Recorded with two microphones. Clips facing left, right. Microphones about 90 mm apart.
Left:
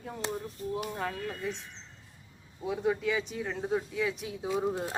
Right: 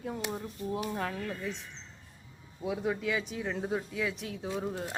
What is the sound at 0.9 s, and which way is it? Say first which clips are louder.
Speech: even; centre (ahead or behind).